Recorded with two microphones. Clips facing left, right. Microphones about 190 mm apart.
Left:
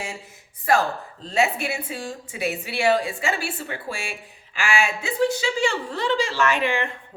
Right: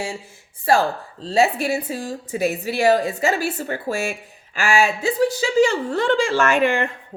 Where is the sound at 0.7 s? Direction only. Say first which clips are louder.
Right 3 dB; 30° right (ahead or behind).